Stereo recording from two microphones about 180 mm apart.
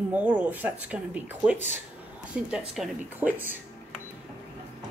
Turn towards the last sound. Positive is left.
turn(degrees=-10)  # may be behind; listen again after turning